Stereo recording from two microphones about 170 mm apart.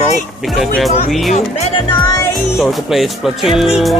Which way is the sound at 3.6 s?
Centre (ahead or behind).